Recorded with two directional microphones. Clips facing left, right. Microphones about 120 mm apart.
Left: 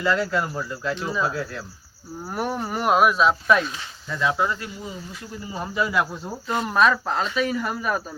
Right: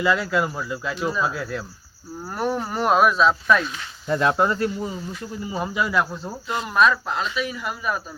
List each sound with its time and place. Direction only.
0.0 s speech: 5° right (ahead or behind)
2.3 s speech: 10° left (ahead or behind)
4.1 s cricket: 60° right (ahead or behind); by 4.9 s 45° right (ahead or behind)
5.7 s speech: centre (ahead or behind)
6.5 s speech: 30° left (ahead or behind)